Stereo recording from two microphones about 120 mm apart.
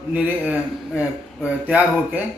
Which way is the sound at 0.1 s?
10° right (ahead or behind).